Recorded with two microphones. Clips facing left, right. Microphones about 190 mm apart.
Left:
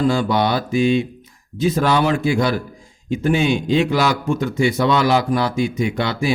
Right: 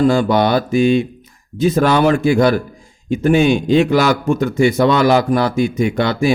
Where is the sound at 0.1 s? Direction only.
50° right (ahead or behind).